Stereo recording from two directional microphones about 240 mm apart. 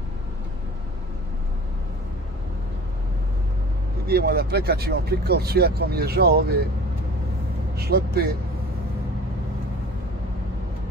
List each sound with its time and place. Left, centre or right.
4.1 s speech: right
7.7 s a man's voice: right